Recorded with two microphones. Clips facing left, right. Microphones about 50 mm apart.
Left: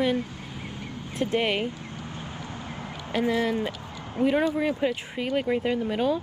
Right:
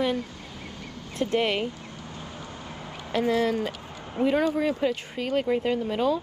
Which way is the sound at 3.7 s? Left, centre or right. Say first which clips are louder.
Left 1 dB; right.